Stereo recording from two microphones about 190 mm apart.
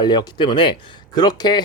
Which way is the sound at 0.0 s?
25° left (ahead or behind).